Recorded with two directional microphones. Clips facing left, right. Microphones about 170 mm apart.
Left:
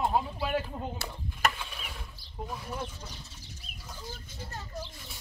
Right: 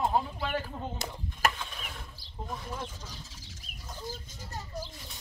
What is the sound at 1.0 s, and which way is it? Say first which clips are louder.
Speech: right 2 dB; 20° right (ahead or behind).